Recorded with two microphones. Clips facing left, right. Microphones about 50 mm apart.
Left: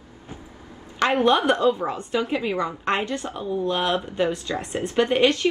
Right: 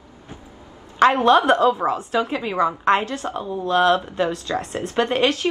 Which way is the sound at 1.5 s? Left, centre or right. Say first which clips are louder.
Right 3 dB; right.